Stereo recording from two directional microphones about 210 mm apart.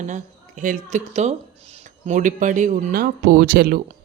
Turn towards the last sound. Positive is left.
turn(degrees=-45)  # may be behind; listen again after turning